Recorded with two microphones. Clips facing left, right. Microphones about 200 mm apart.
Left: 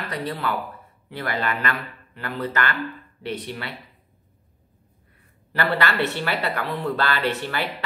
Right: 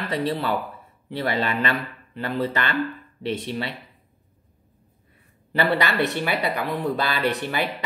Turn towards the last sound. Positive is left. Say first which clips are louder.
# right 1 dB
turn(degrees=-15)  # may be behind; listen again after turning